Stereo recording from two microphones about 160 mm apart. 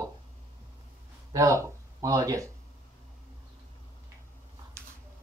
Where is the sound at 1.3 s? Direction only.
20° right (ahead or behind).